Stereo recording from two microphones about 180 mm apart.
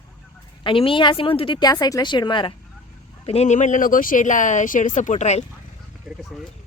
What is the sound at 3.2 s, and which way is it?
Speech, 35° left (ahead or behind).